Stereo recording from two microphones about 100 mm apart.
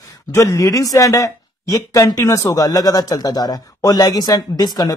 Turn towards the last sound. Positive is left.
turn(degrees=40)  # may be behind; listen again after turning